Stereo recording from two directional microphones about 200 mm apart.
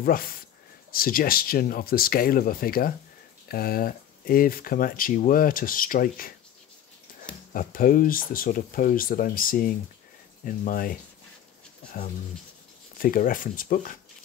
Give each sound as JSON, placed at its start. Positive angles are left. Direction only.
{"t": 0.0, "sound": "speech", "side_deg": 45}
{"t": 7.5, "sound": "speech", "side_deg": 45}
{"t": 12.9, "sound": "speech", "side_deg": 45}